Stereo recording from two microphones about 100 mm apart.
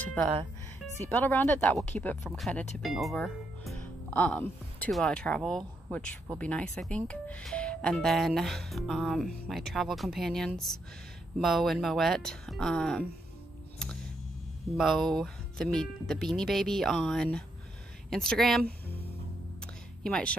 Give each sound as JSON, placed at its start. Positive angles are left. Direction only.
{"t": 1.0, "sound": "speech", "side_deg": 20}
{"t": 2.2, "sound": "speech", "side_deg": 0}
{"t": 4.1, "sound": "a woman's voice", "side_deg": 20}
{"t": 14.7, "sound": "speech", "side_deg": 0}
{"t": 19.6, "sound": "music", "side_deg": 10}